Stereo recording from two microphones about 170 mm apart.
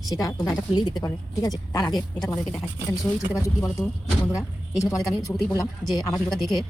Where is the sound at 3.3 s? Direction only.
20° left (ahead or behind).